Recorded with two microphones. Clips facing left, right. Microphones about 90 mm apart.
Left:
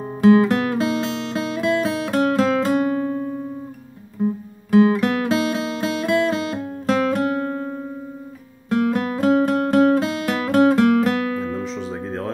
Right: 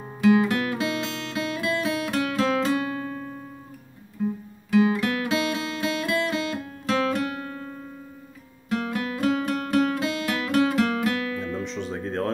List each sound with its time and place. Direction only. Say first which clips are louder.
0.0 s music: left 6 dB; 35° left (ahead or behind)
4.2 s music: left 5 dB; 35° left (ahead or behind)
8.9 s music: left 5 dB; 35° left (ahead or behind)
11.5 s music: left 3 dB; centre (ahead or behind)